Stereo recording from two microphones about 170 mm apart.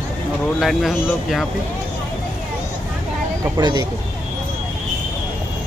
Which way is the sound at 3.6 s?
25° right (ahead or behind).